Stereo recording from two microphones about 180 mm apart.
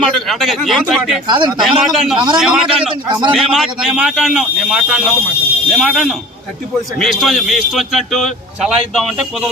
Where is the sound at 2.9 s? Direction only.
25° right (ahead or behind).